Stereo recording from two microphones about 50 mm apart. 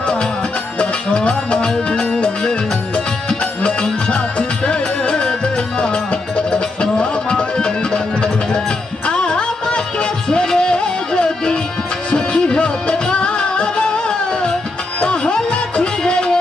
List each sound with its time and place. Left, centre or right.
0.0 s music: left